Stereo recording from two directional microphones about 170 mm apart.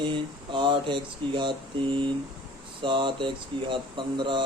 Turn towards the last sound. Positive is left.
turn(degrees=-30)  # may be behind; listen again after turning